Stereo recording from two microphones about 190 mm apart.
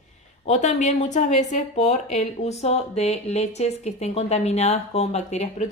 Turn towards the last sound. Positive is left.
turn(degrees=35)  # may be behind; listen again after turning